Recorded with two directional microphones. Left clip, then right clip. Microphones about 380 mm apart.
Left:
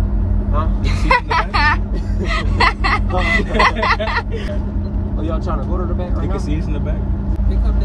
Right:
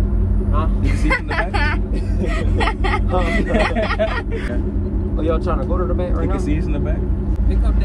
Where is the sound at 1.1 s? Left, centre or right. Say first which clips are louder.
Left 6 dB; centre.